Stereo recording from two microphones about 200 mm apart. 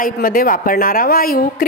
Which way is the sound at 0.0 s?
45° left (ahead or behind).